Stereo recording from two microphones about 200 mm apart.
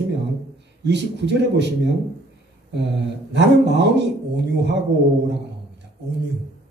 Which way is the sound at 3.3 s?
60° right (ahead or behind).